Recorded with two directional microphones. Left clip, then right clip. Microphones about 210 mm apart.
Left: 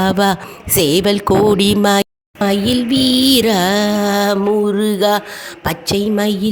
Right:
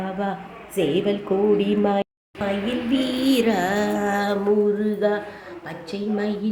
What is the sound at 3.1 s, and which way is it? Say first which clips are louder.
Mantra: left 10 dB; 90° left.